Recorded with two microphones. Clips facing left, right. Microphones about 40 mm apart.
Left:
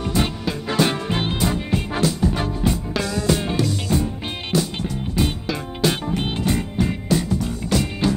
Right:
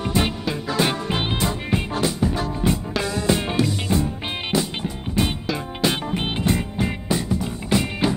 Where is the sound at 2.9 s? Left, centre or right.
Centre.